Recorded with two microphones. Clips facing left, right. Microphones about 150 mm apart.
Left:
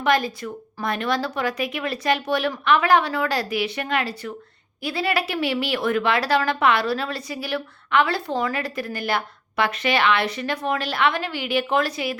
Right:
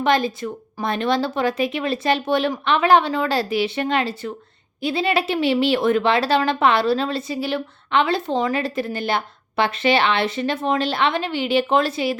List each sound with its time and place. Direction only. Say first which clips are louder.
0.0 s speech: right 2 dB; 25° right (ahead or behind)